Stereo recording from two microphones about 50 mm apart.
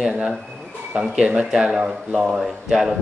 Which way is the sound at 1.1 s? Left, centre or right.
Right.